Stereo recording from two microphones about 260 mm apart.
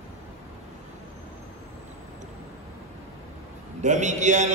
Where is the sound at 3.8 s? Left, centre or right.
Right.